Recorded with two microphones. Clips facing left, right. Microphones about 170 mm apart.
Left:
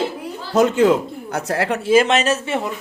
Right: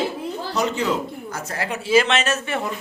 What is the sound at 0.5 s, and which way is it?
Speech, 50° left (ahead or behind).